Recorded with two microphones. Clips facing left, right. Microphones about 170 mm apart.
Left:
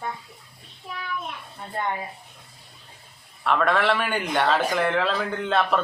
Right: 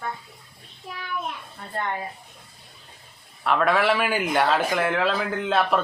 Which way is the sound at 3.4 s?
Centre (ahead or behind).